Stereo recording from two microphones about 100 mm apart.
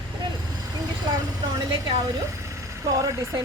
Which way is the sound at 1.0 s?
45° right (ahead or behind).